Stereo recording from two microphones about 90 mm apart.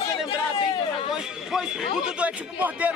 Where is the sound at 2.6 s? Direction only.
15° right (ahead or behind).